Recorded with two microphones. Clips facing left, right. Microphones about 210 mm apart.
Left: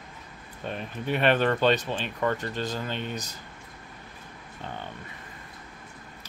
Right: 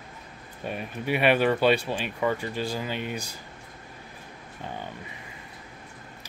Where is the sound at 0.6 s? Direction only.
10° right (ahead or behind).